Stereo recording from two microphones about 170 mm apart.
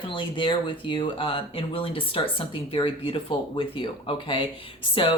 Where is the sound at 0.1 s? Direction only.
30° left (ahead or behind).